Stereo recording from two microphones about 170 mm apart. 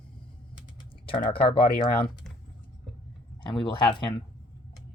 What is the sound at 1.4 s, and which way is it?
Speech, 35° left (ahead or behind).